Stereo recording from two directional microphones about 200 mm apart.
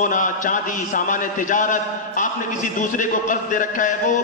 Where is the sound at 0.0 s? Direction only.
40° left (ahead or behind).